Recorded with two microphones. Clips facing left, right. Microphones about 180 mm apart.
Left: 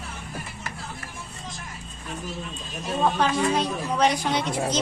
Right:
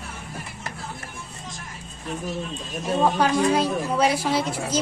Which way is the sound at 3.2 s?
5° right (ahead or behind).